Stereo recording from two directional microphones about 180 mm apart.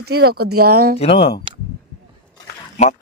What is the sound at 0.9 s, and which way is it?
Speech, 35° left (ahead or behind).